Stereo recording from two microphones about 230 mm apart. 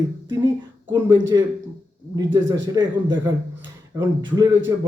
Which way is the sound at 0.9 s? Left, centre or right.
Centre.